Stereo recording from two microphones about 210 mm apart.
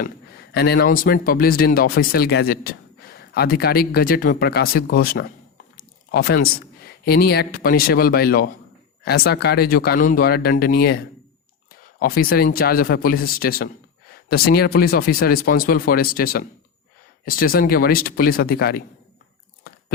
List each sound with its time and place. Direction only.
0.5 s speech: 50° left (ahead or behind)
5.7 s a sound: 45° left (ahead or behind)
7.0 s speech: 50° left (ahead or behind)